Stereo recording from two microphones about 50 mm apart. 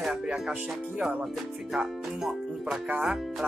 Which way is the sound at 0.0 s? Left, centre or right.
Centre.